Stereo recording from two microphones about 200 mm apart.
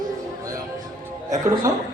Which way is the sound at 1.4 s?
20° right (ahead or behind).